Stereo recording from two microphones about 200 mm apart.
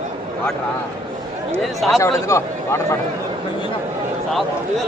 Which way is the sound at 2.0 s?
15° left (ahead or behind).